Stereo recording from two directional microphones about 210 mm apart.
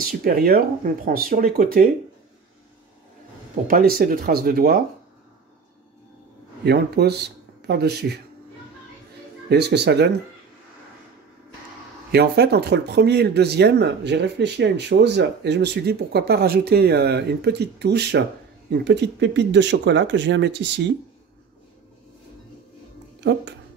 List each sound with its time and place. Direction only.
0.0 s speech: 45° right (ahead or behind)
3.6 s speech: 45° right (ahead or behind)
6.6 s speech: 50° right (ahead or behind)
9.5 s speech: 55° right (ahead or behind)
12.1 s speech: 50° right (ahead or behind)